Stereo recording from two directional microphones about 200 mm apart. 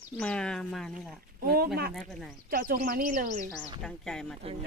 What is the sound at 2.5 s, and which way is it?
Speech, 45° right (ahead or behind).